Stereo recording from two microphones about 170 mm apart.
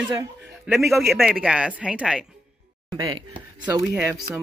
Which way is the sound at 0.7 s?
Centre (ahead or behind).